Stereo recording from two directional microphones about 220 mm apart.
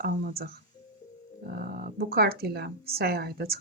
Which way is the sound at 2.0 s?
45° right (ahead or behind).